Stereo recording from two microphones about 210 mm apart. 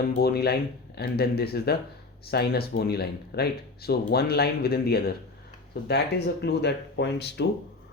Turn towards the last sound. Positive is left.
turn(degrees=55)  # may be behind; listen again after turning